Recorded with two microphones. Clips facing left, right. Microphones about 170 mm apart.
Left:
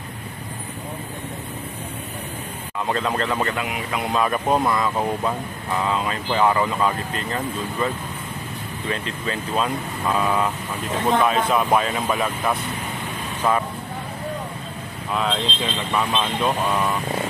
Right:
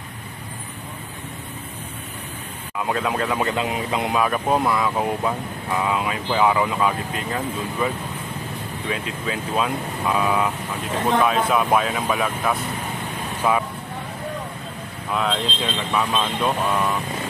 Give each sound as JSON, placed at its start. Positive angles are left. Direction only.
{"t": 2.8, "sound": "speech", "side_deg": -5}
{"t": 3.5, "sound": "speech", "side_deg": -25}
{"t": 4.1, "sound": "speech", "side_deg": -5}
{"t": 15.1, "sound": "speech", "side_deg": 0}